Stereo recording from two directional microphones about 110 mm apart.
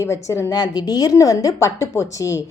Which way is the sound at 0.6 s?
40° left (ahead or behind).